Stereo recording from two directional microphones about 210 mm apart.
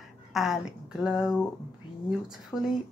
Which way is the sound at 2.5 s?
5° left (ahead or behind).